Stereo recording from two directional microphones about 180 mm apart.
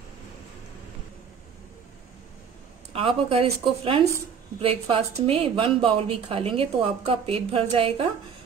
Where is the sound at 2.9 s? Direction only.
30° right (ahead or behind).